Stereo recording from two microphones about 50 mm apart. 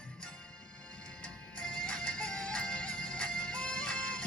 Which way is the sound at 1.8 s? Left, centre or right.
Centre.